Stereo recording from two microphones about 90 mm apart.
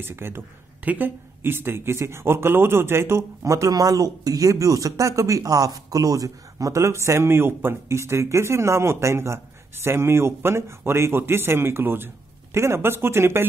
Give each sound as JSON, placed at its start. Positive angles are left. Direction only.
{"t": 0.0, "sound": "a man's voice", "side_deg": -25}